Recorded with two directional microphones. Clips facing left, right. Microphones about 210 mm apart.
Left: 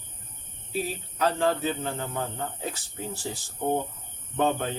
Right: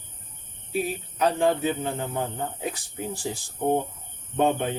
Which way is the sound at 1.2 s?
15° right (ahead or behind).